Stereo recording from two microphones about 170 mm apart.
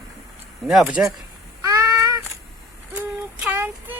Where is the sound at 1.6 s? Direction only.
20° right (ahead or behind).